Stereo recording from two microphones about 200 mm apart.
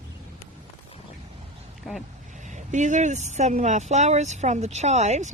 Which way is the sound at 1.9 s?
Centre (ahead or behind).